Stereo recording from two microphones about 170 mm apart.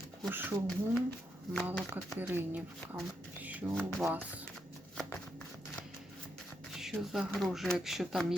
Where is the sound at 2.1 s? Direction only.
10° right (ahead or behind).